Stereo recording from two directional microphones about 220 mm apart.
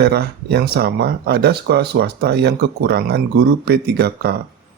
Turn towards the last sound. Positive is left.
turn(degrees=-45)  # may be behind; listen again after turning